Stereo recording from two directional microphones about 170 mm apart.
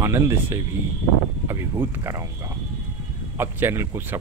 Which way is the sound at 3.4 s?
15° right (ahead or behind).